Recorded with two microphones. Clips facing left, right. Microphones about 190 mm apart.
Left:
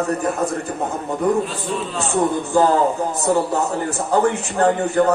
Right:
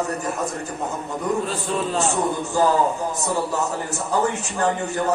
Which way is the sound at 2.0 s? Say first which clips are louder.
Left 3 dB; 55° left (ahead or behind).